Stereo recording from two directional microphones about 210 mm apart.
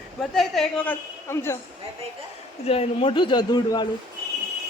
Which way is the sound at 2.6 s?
25° left (ahead or behind).